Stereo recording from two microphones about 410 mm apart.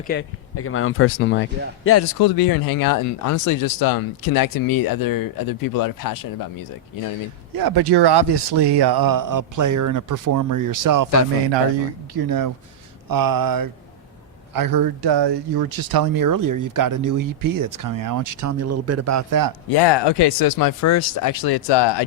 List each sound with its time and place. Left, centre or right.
0.1 s a man's voice: left
2.1 s speech: left
7.5 s speech: right
12.1 s speech: right
19.7 s speech: left